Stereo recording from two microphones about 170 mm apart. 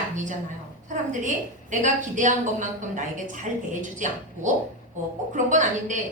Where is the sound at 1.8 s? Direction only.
45° right (ahead or behind).